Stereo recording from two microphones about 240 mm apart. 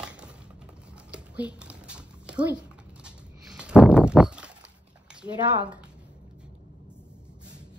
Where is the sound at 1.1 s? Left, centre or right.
Centre.